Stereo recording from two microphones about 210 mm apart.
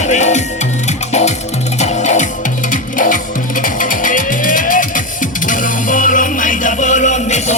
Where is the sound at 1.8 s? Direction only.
35° left (ahead or behind).